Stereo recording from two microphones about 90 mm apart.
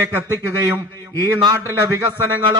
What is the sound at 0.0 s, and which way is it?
A man's voice, 25° right (ahead or behind).